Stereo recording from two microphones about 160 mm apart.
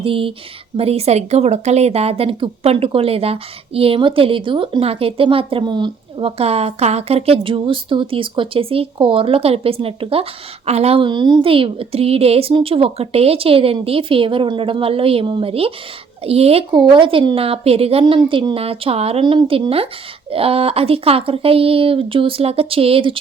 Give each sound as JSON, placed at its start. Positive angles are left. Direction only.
{"t": 0.0, "sound": "speech", "side_deg": -35}